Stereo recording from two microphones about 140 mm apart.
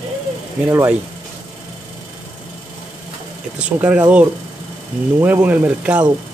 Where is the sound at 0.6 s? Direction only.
15° right (ahead or behind).